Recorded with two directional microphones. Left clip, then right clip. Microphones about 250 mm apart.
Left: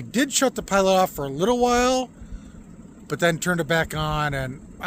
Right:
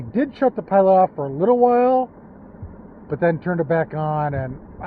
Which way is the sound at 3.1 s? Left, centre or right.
Left.